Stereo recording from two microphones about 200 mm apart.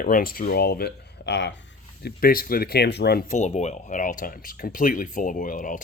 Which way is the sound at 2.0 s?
50° left (ahead or behind).